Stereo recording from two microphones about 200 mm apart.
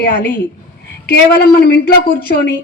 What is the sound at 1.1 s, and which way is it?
A woman's voice, 55° left (ahead or behind).